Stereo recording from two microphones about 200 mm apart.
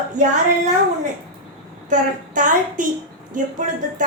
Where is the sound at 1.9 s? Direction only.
40° right (ahead or behind).